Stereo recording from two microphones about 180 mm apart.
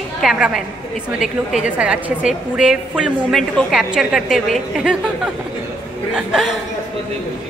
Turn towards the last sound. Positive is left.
turn(degrees=-5)  # may be behind; listen again after turning